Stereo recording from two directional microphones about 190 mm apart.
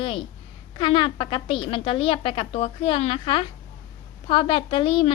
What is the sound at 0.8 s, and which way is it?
Speech, 25° left (ahead or behind).